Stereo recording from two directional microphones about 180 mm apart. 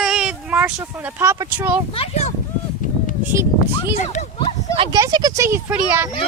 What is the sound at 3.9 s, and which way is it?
Speech, 40° left (ahead or behind).